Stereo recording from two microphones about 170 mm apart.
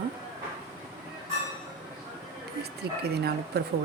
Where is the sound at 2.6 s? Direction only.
70° right (ahead or behind).